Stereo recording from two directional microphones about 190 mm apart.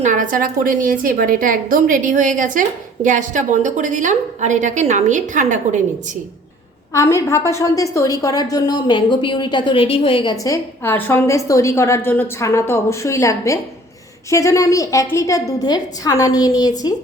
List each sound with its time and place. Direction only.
0.0 s a woman's voice: 40° right (ahead or behind)
6.9 s a woman's voice: 15° left (ahead or behind)